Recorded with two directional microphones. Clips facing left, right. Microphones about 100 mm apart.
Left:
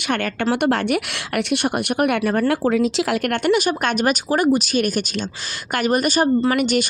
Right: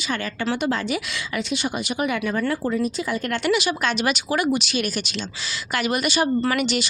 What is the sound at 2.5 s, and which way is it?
Speech, 80° left.